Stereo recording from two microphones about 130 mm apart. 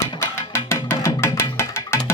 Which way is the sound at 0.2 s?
20° left (ahead or behind).